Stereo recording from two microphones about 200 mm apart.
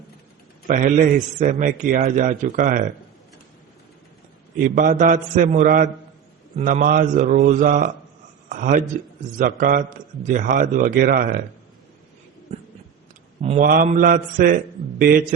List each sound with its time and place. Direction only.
0.7 s a man's voice: 40° right (ahead or behind)
4.6 s a man's voice: 40° right (ahead or behind)
12.5 s a sound: 35° right (ahead or behind)
13.4 s a man's voice: 30° right (ahead or behind)